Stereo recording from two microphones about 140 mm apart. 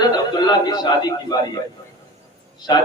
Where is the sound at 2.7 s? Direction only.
35° left (ahead or behind).